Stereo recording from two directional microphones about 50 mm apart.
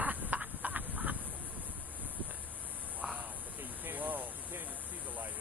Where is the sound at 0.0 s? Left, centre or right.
Right.